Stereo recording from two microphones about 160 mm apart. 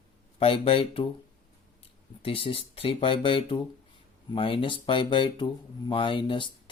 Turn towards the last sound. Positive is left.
turn(degrees=30)  # may be behind; listen again after turning